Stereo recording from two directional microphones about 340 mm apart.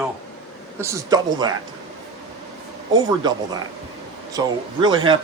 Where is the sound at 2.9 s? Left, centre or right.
Centre.